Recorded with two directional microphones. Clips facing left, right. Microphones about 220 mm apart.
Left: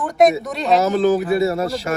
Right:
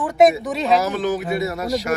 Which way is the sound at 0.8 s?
30° left (ahead or behind).